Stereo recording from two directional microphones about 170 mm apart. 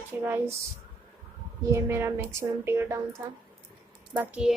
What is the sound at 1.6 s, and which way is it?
A woman's voice, 15° right (ahead or behind).